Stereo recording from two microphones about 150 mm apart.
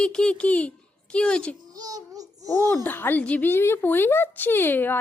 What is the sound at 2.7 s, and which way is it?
A woman's voice, 15° left (ahead or behind).